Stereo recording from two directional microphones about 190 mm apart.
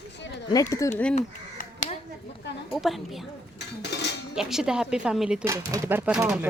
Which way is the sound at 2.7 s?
Centre (ahead or behind).